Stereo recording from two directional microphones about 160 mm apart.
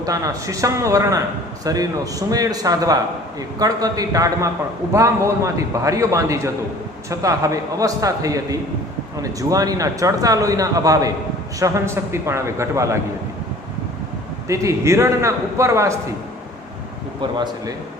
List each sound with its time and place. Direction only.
0.0 s a man's voice: 20° right (ahead or behind)
14.4 s a man's voice: 20° right (ahead or behind)
17.2 s a man's voice: 25° right (ahead or behind)